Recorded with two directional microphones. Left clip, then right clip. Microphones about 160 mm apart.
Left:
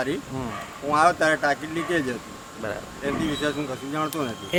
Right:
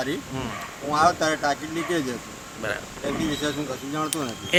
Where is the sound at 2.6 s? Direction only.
Centre (ahead or behind).